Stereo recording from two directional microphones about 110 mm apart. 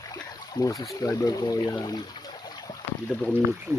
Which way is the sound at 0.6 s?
30° left (ahead or behind).